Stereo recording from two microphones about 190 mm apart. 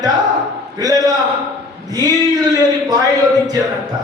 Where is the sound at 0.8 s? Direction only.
20° right (ahead or behind).